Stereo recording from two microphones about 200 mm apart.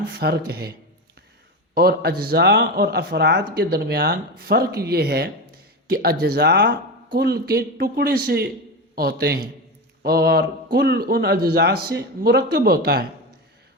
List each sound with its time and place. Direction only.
0.1 s a man's voice: 55° right (ahead or behind)
1.7 s a man's voice: 50° right (ahead or behind)